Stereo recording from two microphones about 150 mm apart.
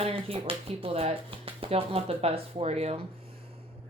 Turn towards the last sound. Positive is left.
turn(degrees=-40)  # may be behind; listen again after turning